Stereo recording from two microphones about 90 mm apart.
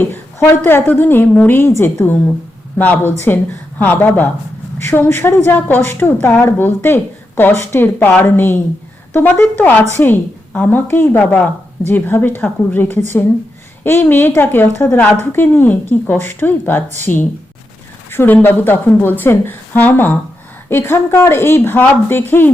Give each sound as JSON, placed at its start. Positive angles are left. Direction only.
{"t": 0.0, "sound": "a woman's voice", "side_deg": 25}